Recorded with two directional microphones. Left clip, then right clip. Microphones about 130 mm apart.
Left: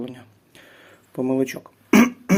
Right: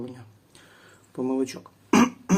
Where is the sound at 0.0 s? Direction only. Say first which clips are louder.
Left 4 dB; 20° left (ahead or behind).